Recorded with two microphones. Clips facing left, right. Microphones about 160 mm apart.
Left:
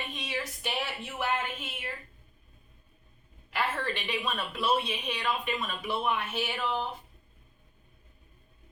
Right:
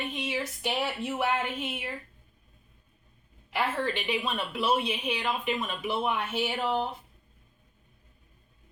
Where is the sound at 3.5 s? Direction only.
10° right (ahead or behind).